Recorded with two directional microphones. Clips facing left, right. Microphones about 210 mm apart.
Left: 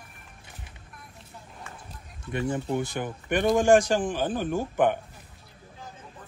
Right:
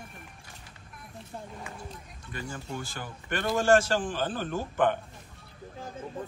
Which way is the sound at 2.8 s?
20° left (ahead or behind).